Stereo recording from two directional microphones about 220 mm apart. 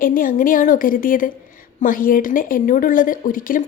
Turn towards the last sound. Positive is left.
turn(degrees=40)  # may be behind; listen again after turning